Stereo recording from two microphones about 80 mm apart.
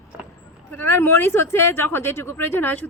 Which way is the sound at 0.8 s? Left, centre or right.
Left.